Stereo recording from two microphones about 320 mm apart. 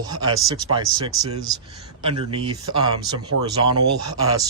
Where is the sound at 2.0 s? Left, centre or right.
Centre.